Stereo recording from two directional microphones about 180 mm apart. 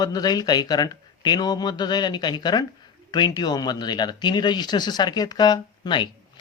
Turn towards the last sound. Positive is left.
turn(degrees=25)  # may be behind; listen again after turning